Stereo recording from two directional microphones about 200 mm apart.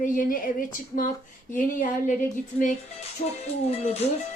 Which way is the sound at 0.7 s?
40° left (ahead or behind).